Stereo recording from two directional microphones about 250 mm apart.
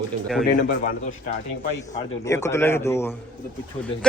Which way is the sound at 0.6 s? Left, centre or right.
Left.